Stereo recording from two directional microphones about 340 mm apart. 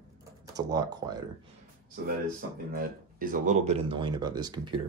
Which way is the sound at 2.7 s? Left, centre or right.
Right.